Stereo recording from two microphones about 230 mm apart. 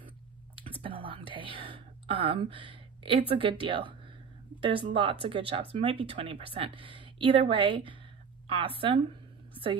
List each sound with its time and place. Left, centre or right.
0.6 s speech: right